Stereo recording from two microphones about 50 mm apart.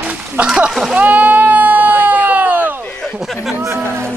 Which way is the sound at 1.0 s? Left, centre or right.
Right.